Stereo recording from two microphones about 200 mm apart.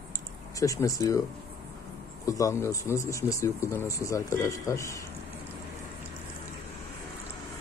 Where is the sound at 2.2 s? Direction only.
15° left (ahead or behind).